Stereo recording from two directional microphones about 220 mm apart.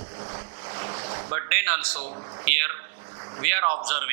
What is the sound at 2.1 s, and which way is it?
Speech, 25° right (ahead or behind).